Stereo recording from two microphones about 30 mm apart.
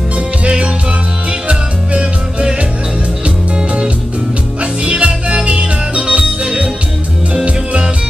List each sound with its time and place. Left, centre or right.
4.8 s music: right